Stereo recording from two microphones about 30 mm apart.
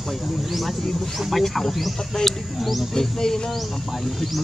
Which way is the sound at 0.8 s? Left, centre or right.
Centre.